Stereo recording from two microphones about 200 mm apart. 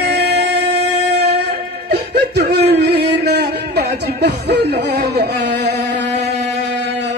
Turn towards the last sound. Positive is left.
turn(degrees=-55)  # may be behind; listen again after turning